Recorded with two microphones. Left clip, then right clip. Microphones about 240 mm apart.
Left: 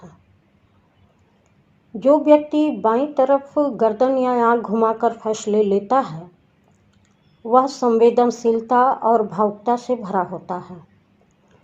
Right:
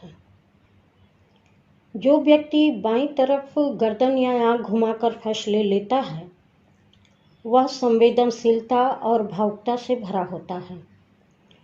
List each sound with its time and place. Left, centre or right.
2.0 s speech: left
7.4 s speech: left